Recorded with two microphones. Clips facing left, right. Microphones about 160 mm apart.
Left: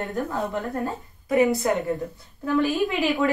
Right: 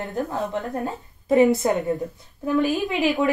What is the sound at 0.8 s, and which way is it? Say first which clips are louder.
A woman's voice: right 4 dB; 20° right (ahead or behind).